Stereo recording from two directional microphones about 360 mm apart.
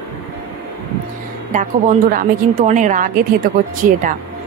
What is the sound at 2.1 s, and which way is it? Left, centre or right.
A woman's voice, right.